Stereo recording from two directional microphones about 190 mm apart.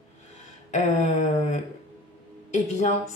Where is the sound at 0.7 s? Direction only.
40° left (ahead or behind).